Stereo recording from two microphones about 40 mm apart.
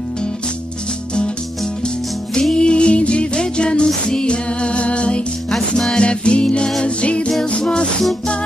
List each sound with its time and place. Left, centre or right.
2.5 s music: left
5.5 s music: centre
5.9 s music: left